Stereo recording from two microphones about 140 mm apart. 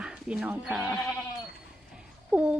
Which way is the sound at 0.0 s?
5° right (ahead or behind).